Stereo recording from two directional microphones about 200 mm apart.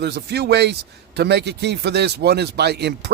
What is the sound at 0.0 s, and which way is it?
A man's voice, 55° right (ahead or behind).